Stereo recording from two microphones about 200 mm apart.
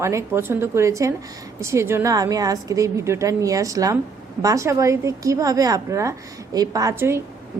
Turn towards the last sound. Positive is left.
turn(degrees=-15)  # may be behind; listen again after turning